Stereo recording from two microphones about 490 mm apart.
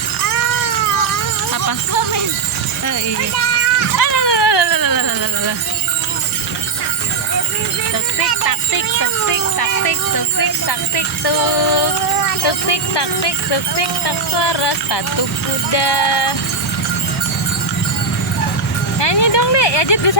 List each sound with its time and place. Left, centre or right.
1.6 s music: left
3.9 s music: left
8.4 s music: left
10.7 s speech: left
18.9 s speech: left